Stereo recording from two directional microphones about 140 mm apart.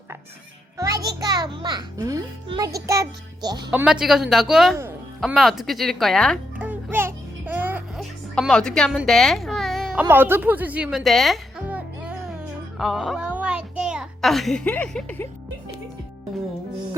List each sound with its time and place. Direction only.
0.8 s a child's voice: 25° right (ahead or behind)
3.7 s speech: 5° right (ahead or behind)
6.6 s music: 15° right (ahead or behind)
7.9 s music: centre (ahead or behind)
9.0 s a sound: 5° left (ahead or behind)
10.0 s speech: 15° right (ahead or behind)
11.0 s speech: centre (ahead or behind)
11.7 s music: 5° right (ahead or behind)
12.8 s a child's voice: centre (ahead or behind)